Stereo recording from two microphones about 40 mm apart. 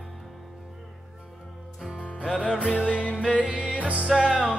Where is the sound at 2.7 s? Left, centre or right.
Right.